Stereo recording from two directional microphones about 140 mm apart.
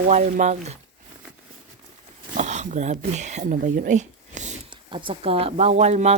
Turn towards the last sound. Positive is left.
turn(degrees=-50)  # may be behind; listen again after turning